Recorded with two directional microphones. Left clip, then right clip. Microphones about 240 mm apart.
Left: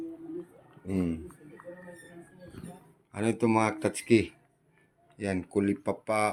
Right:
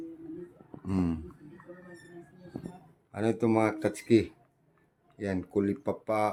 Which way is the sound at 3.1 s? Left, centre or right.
Centre.